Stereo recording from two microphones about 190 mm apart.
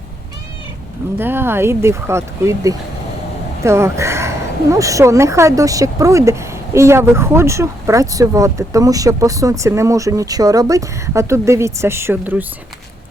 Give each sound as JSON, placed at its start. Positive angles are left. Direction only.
{"t": 1.2, "sound": "a woman's voice", "side_deg": -10}